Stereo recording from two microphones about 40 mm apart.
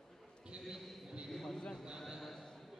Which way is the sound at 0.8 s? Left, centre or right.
Centre.